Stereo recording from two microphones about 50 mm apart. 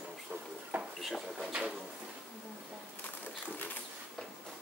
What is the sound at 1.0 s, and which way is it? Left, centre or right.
Speech, centre.